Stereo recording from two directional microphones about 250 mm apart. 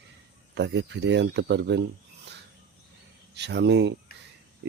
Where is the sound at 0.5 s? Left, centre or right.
Right.